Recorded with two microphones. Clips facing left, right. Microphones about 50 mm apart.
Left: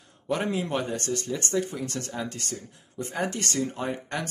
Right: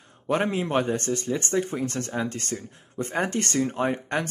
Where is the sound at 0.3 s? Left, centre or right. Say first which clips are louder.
Right 3 dB; right.